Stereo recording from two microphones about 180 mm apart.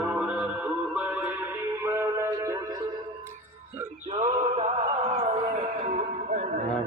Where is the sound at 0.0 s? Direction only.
5° right (ahead or behind).